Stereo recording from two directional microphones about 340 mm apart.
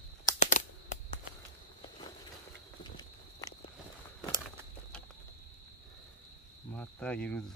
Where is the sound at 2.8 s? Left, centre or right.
Centre.